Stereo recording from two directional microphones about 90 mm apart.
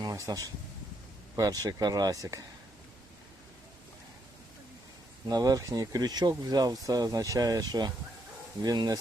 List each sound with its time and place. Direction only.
0.0 s speech: 45° right (ahead or behind)
5.3 s speech: 45° right (ahead or behind)